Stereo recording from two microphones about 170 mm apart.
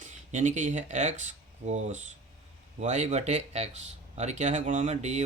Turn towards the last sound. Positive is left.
turn(degrees=-45)  # may be behind; listen again after turning